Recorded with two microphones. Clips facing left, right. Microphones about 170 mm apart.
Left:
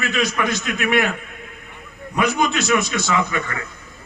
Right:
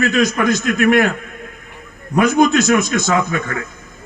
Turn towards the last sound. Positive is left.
turn(degrees=-45)  # may be behind; listen again after turning